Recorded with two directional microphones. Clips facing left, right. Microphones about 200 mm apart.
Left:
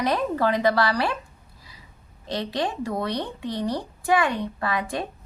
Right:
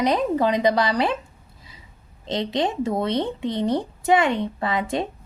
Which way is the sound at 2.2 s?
20° right (ahead or behind).